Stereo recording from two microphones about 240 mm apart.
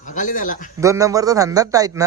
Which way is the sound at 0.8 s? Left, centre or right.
Centre.